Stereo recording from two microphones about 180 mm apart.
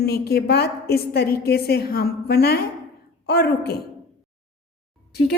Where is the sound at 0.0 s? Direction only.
60° left (ahead or behind).